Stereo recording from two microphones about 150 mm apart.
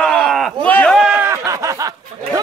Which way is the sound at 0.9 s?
5° right (ahead or behind).